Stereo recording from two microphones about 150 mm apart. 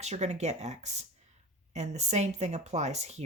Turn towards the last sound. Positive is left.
turn(degrees=-45)  # may be behind; listen again after turning